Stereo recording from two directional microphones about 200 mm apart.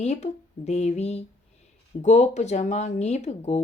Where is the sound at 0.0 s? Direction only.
35° left (ahead or behind).